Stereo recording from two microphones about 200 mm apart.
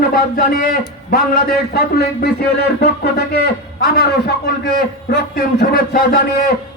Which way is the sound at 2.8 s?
55° left (ahead or behind).